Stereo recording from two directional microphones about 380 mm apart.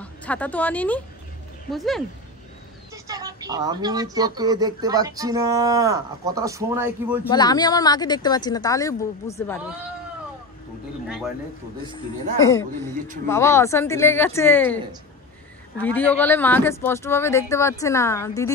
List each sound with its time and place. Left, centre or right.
0.0 s speech: centre
7.2 s speech: centre
12.4 s speech: centre
15.8 s speech: centre